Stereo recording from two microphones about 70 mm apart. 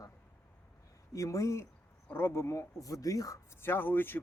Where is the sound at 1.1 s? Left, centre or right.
Left.